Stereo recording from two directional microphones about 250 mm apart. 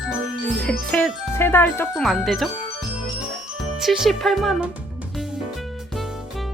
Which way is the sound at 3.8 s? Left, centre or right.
Centre.